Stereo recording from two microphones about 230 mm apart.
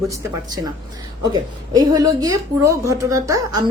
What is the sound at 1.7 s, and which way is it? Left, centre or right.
Speech, centre.